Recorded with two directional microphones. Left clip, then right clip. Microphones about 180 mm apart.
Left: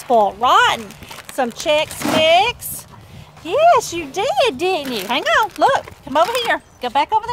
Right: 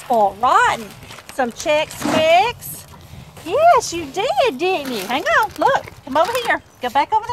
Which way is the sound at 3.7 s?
25° left (ahead or behind).